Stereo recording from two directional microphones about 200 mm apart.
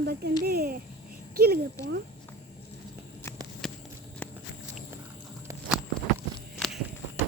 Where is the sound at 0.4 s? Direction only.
50° right (ahead or behind).